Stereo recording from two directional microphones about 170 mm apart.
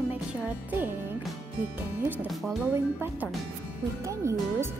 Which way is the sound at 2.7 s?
15° right (ahead or behind).